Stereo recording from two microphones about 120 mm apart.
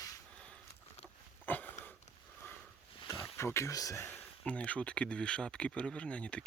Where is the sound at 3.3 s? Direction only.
20° left (ahead or behind).